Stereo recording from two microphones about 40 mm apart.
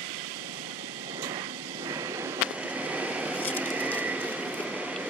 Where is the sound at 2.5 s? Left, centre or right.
Right.